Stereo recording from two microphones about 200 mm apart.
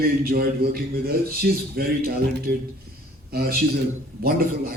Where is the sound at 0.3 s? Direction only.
45° right (ahead or behind).